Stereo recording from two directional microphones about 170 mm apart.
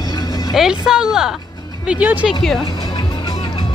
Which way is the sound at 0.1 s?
20° left (ahead or behind).